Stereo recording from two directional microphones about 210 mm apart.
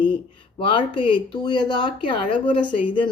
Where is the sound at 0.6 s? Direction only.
25° left (ahead or behind).